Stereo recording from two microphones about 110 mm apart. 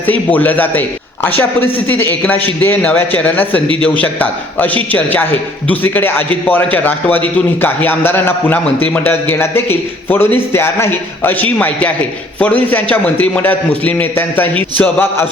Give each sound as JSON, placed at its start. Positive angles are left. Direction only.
{"t": 0.1, "sound": "a man's voice", "side_deg": 15}